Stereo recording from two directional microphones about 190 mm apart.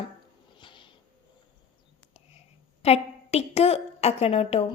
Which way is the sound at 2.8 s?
35° left (ahead or behind).